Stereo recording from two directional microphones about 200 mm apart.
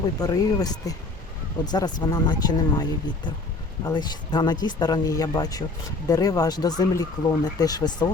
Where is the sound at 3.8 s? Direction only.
20° left (ahead or behind).